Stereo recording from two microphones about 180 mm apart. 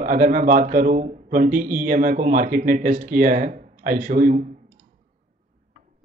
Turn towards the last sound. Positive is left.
turn(degrees=-50)  # may be behind; listen again after turning